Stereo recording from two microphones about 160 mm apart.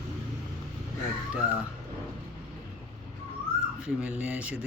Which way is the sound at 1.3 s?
5° right (ahead or behind).